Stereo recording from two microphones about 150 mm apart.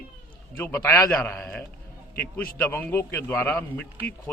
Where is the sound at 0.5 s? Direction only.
20° left (ahead or behind).